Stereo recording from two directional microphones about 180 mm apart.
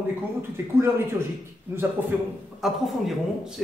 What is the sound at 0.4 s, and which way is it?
A man's voice, 15° right (ahead or behind).